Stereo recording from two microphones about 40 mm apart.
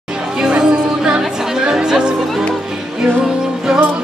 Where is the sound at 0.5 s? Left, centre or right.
Right.